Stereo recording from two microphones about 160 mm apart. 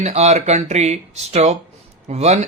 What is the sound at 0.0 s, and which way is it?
Speech, 45° right (ahead or behind).